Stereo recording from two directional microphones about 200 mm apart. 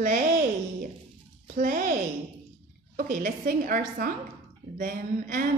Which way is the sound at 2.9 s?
45° right (ahead or behind).